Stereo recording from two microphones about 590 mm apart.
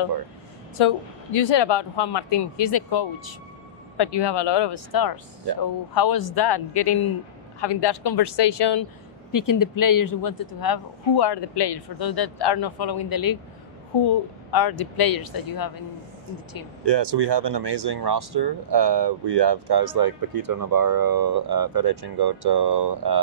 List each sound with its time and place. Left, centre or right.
0.7 s speech: left
9.3 s speech: left
16.8 s speech: right